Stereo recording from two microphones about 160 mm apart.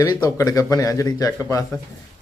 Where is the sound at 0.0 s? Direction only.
20° left (ahead or behind).